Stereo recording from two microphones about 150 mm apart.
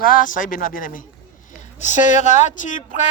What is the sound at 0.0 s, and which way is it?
Speech, 65° left (ahead or behind).